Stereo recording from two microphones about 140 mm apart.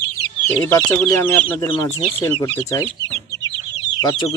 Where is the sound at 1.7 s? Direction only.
35° left (ahead or behind).